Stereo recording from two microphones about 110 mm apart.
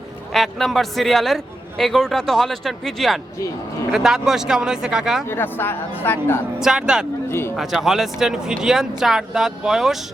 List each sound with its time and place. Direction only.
0.3 s speech: centre (ahead or behind)
5.3 s speech: 20° left (ahead or behind)
6.6 s speech: 5° right (ahead or behind)
7.3 s a man's voice: 25° left (ahead or behind)
7.5 s speech: centre (ahead or behind)